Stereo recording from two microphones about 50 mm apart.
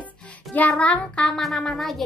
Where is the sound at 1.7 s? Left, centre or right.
Centre.